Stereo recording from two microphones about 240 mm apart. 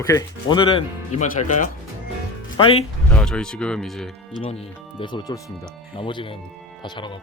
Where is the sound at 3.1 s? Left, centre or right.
Centre.